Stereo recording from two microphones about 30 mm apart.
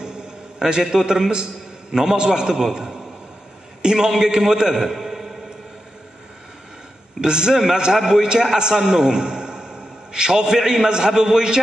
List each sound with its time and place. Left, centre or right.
0.0 s a sound: right
1.9 s a man's voice: centre
3.8 s a man's voice: right
7.2 s a man's voice: right